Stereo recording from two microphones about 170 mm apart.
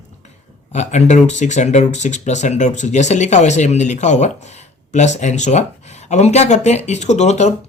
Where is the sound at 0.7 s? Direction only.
40° left (ahead or behind).